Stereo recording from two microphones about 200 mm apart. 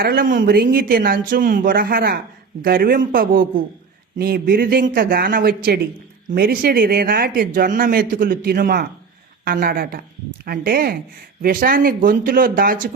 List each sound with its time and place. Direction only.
0.0 s speech: 45° right (ahead or behind)